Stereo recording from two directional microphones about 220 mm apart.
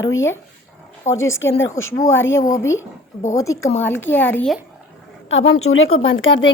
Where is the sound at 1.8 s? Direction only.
15° left (ahead or behind).